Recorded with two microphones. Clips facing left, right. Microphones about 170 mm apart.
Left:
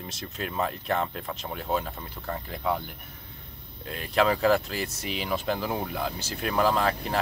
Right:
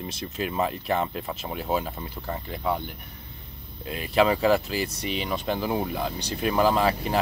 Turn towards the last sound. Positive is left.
turn(degrees=0)  # may be behind; listen again after turning